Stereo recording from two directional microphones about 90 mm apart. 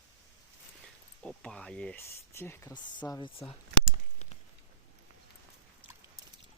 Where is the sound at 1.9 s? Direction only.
25° left (ahead or behind).